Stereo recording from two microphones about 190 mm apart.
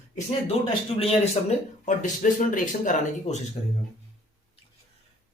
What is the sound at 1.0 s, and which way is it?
Speech, 30° left (ahead or behind).